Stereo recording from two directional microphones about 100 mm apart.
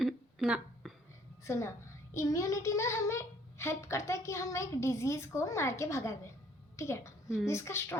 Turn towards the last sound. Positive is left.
turn(degrees=25)  # may be behind; listen again after turning